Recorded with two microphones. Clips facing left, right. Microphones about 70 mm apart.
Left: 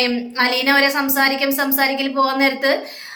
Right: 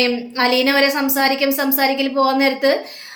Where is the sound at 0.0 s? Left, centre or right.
Left.